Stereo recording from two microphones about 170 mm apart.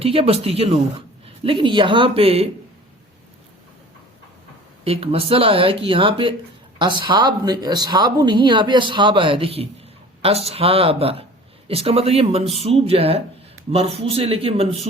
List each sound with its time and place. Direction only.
0.0 s speech: 35° right (ahead or behind)
4.8 s speech: 35° right (ahead or behind)